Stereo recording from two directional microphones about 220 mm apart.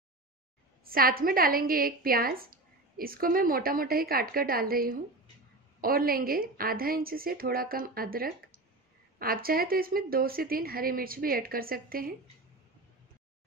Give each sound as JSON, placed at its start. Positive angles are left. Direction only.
{"t": 0.8, "sound": "a woman's voice", "side_deg": -40}